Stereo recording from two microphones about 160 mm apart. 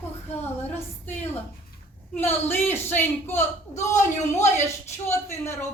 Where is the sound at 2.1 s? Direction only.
15° left (ahead or behind).